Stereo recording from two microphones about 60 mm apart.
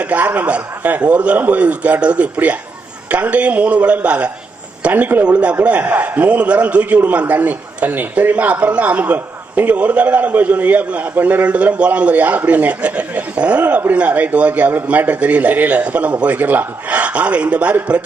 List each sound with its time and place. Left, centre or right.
0.0 s a man's voice: right